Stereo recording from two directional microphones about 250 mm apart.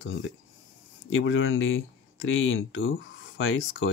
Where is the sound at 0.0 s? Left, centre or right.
Left.